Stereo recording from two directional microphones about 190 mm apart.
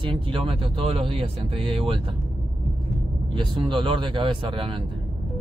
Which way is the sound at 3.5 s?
25° right (ahead or behind).